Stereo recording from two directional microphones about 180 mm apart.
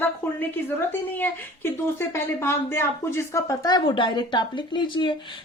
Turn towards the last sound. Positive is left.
turn(degrees=25)  # may be behind; listen again after turning